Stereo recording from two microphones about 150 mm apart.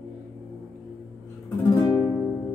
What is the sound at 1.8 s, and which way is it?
Music, 25° left (ahead or behind).